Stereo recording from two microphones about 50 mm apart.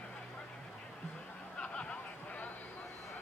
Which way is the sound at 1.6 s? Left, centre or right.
Left.